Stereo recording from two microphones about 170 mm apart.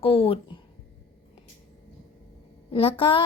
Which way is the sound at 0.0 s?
35° left (ahead or behind).